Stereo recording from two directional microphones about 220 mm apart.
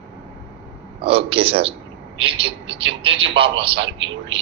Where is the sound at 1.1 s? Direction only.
25° right (ahead or behind).